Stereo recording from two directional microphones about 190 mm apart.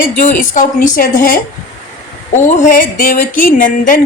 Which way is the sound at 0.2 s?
40° left (ahead or behind).